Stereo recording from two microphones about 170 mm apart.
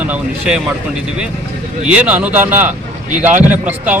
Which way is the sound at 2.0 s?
5° right (ahead or behind).